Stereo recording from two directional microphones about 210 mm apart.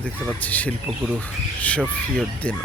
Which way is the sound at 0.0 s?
5° left (ahead or behind).